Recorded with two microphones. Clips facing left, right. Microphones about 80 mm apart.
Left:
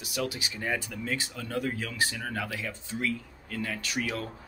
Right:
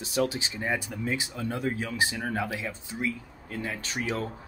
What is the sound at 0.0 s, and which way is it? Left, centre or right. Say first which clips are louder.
Speech: right 5 dB; right.